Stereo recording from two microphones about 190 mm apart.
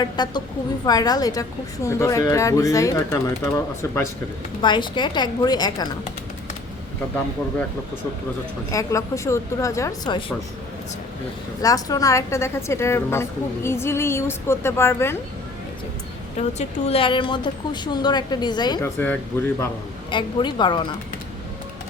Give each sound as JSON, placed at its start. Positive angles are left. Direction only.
{"t": 0.0, "sound": "a woman's voice", "side_deg": 20}
{"t": 4.6, "sound": "speech", "side_deg": 25}
{"t": 8.7, "sound": "a woman's voice", "side_deg": 15}
{"t": 11.6, "sound": "a woman's voice", "side_deg": 20}
{"t": 16.4, "sound": "speech", "side_deg": 35}
{"t": 18.9, "sound": "a woman's voice", "side_deg": 10}
{"t": 20.1, "sound": "speech", "side_deg": 25}